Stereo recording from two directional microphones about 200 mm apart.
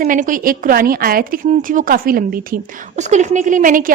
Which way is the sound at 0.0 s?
40° right (ahead or behind).